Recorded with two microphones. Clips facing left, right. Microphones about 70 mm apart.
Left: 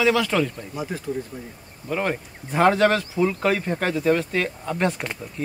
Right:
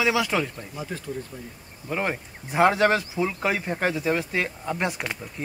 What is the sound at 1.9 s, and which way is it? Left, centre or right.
Speech, centre.